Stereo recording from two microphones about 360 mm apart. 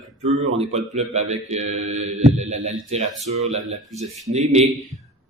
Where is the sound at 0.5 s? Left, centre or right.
Centre.